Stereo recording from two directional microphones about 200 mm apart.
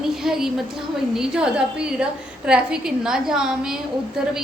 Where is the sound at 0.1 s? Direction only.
Centre (ahead or behind).